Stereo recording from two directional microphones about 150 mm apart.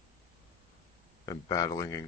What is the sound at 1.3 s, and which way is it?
Speech, 25° left (ahead or behind).